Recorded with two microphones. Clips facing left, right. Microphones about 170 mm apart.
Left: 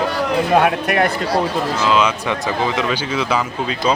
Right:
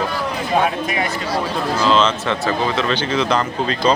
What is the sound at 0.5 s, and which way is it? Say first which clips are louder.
Speech: left 2 dB; 65° left (ahead or behind).